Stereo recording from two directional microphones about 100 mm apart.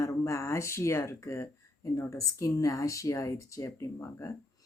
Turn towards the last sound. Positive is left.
turn(degrees=30)  # may be behind; listen again after turning